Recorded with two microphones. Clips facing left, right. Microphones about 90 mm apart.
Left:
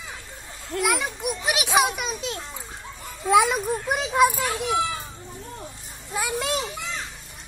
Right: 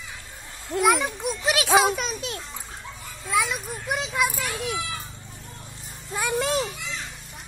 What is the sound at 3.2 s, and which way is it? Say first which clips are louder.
Speech: left 7 dB; 50° left (ahead or behind).